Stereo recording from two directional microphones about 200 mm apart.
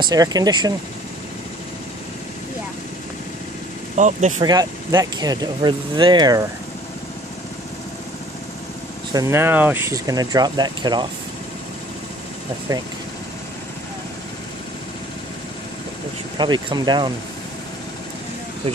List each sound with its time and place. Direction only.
0.1 s speech: 20° right (ahead or behind)
3.9 s speech: 35° right (ahead or behind)
4.4 s speech: 20° right (ahead or behind)
9.1 s speech: 15° right (ahead or behind)
16.3 s speech: 20° right (ahead or behind)